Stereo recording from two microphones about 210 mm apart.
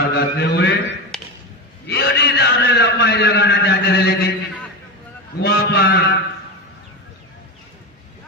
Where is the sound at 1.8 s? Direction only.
50° left (ahead or behind).